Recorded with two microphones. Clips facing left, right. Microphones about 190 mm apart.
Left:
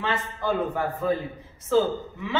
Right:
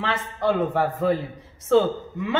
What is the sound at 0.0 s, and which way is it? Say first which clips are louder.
A man's voice: right 3 dB; 85° right.